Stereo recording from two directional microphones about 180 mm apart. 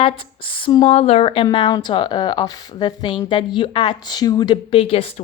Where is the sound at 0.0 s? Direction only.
30° left (ahead or behind).